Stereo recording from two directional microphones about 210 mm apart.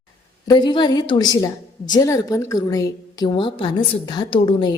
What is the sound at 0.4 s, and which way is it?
A woman's voice, 20° left (ahead or behind).